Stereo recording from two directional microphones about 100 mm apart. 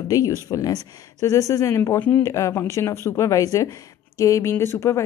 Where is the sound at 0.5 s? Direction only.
35° left (ahead or behind).